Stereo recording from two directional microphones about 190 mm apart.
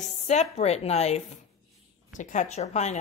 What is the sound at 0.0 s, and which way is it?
Speech, 35° left (ahead or behind).